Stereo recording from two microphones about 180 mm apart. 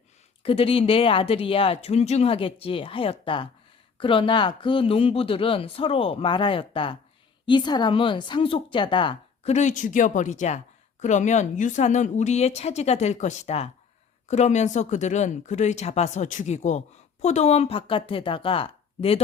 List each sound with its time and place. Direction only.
0.4 s speech: 30° left (ahead or behind)